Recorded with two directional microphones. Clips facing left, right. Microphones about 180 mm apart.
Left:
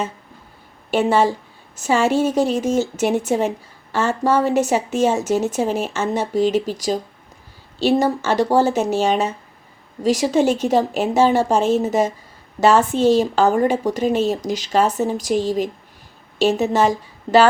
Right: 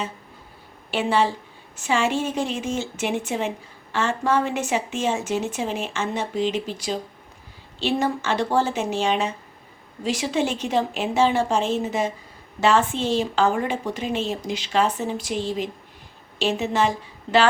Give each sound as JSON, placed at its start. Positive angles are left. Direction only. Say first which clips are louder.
{"t": 0.9, "sound": "a woman's voice", "louder": "left 5 dB", "side_deg": 45}